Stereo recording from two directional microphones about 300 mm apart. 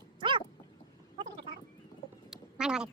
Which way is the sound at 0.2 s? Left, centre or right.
Centre.